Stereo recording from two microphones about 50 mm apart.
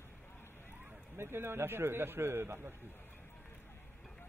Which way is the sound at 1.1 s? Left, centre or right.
Right.